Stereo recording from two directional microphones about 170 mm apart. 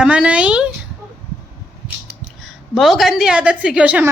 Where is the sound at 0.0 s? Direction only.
5° right (ahead or behind).